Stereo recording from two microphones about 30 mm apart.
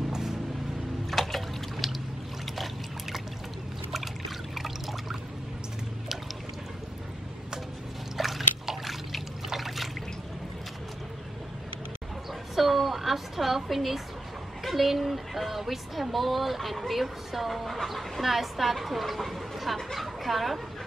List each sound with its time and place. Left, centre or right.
0.1 s a sound: centre
1.1 s trickle: centre
4.6 s water: centre
8.2 s liquid: centre
9.5 s water: centre
12.5 s a sound: centre
14.6 s speech: centre